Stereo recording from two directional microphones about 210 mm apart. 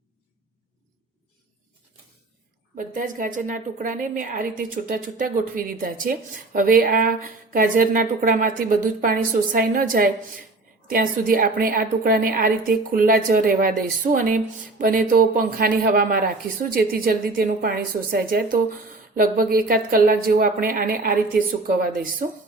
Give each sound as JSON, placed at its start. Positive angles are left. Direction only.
{"t": 2.7, "sound": "a woman's voice", "side_deg": -40}